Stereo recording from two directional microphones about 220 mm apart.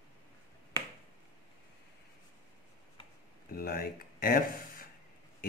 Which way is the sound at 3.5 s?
40° left (ahead or behind).